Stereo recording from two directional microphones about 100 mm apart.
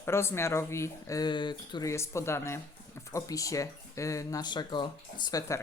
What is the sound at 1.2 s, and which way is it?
Speech, 50° left (ahead or behind).